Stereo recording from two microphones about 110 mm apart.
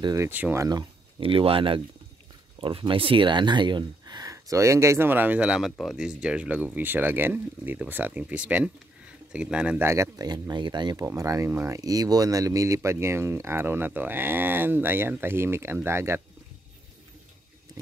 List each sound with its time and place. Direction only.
0.0 s speech: 30° right (ahead or behind)
0.3 s speech: 15° right (ahead or behind)
0.6 s speech: 35° right (ahead or behind)
1.2 s speech: 55° right (ahead or behind); by 9.8 s 10° right (ahead or behind)
9.8 s speech: 30° right (ahead or behind)
11.1 s speech: 30° right (ahead or behind)